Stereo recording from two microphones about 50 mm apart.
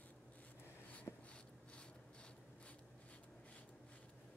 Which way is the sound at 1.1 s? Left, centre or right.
Left.